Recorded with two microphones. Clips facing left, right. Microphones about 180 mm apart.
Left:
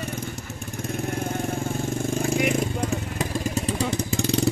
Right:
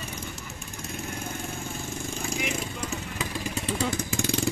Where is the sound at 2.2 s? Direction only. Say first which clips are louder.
Left 9 dB; 45° left (ahead or behind).